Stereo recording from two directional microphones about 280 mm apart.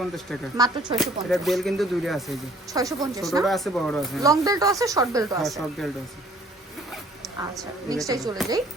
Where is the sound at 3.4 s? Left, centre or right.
Centre.